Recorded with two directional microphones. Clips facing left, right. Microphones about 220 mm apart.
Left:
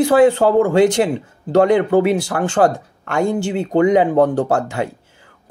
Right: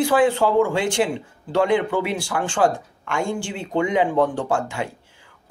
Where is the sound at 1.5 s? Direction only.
40° left (ahead or behind).